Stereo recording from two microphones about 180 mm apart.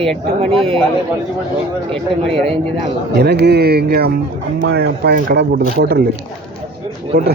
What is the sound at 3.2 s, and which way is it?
Speech, 65° right (ahead or behind).